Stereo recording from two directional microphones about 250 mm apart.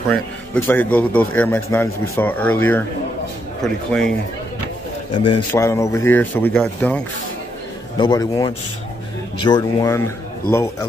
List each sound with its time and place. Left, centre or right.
0.1 s a man's voice: centre
5.5 s a man's voice: centre
8.0 s a man's voice: centre